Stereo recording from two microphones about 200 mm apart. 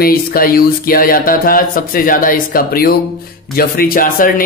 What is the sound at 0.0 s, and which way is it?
Speech, 45° left (ahead or behind).